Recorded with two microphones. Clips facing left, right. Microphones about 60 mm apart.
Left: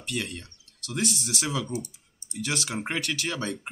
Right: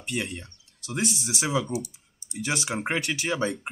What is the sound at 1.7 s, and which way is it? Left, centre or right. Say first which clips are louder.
Computer keyboard: right 2 dB; left.